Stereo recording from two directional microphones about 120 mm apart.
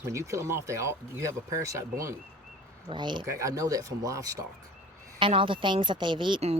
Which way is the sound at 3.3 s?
25° right (ahead or behind).